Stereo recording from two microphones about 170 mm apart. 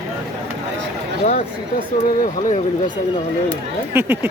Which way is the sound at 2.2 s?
50° left (ahead or behind).